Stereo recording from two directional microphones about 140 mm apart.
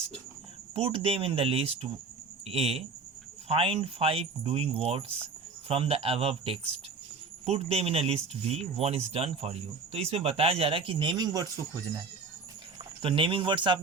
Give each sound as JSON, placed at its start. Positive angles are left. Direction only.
{"t": 0.7, "sound": "speech", "side_deg": -40}
{"t": 13.0, "sound": "speech", "side_deg": -40}